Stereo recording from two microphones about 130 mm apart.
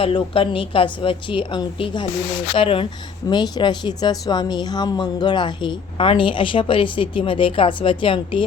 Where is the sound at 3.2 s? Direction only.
30° left (ahead or behind).